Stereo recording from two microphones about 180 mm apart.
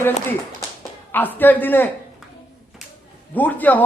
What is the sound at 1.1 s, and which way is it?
Speech, 10° left (ahead or behind).